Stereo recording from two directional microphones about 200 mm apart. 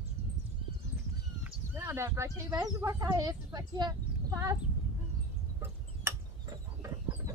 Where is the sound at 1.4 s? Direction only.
10° right (ahead or behind).